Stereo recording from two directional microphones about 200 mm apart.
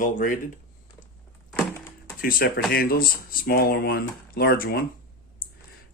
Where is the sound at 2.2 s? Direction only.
45° left (ahead or behind).